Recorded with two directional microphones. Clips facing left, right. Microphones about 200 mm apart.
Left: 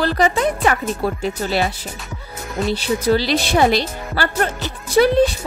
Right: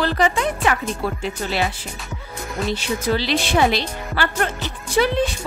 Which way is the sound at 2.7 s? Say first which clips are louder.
Left 5 dB; 35° left (ahead or behind).